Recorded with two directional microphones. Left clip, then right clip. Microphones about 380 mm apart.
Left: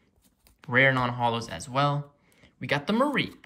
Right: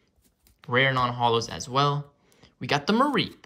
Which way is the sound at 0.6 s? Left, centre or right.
Centre.